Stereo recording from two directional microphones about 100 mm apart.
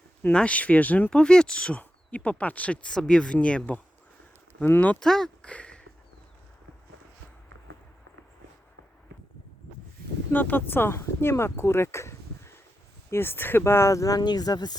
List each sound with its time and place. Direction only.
0.2 s speech: 15° left (ahead or behind)
10.3 s speech: 20° left (ahead or behind); by 14.8 s 40° left (ahead or behind)